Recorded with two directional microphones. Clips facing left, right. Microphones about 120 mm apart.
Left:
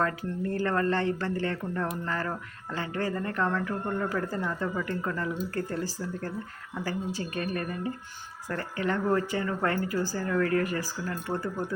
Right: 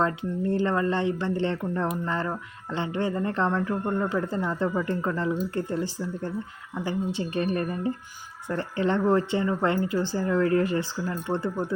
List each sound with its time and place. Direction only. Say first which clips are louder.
0.0 s speech: right 3 dB; 20° right (ahead or behind)